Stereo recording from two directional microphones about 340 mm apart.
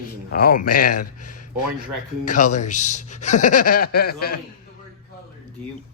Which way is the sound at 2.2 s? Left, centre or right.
Left.